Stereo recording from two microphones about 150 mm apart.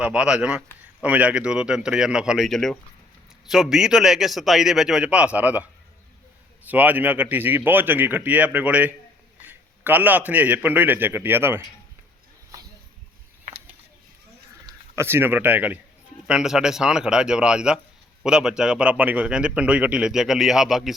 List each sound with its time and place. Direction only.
0.0 s a man's voice: 5° right (ahead or behind)
6.7 s a man's voice: 10° right (ahead or behind)
14.9 s a man's voice: 15° right (ahead or behind)